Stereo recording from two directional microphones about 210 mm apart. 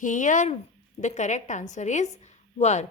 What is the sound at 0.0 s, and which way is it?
A woman's voice, 35° left (ahead or behind).